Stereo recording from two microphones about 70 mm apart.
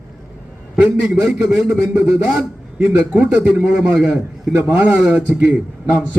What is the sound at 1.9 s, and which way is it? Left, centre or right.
A man's voice, right.